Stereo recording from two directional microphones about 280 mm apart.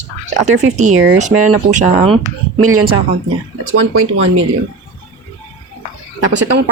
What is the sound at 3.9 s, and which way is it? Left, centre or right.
Speech, right.